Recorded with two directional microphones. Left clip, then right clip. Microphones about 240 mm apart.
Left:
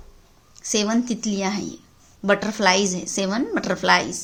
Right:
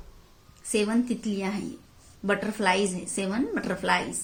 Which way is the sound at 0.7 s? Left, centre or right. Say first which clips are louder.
Left 4 dB; left.